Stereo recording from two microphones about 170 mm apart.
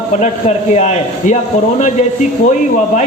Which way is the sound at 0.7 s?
40° left (ahead or behind).